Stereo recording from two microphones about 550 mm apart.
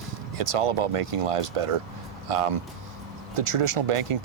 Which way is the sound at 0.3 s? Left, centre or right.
Right.